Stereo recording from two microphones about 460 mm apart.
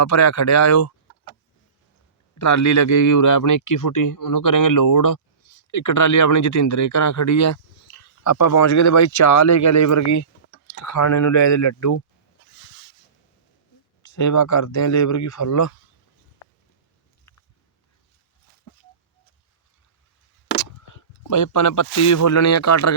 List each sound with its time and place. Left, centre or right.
0.0 s speech: left
2.4 s speech: left
14.0 s speech: left
20.6 s speech: left